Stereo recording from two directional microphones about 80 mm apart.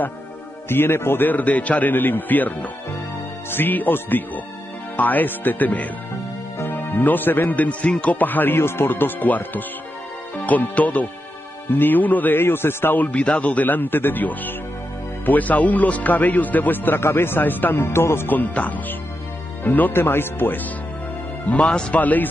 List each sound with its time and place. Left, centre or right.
0.7 s a man's voice: left
21.5 s speech: centre